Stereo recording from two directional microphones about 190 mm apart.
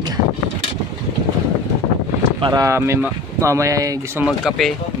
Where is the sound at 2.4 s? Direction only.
20° right (ahead or behind).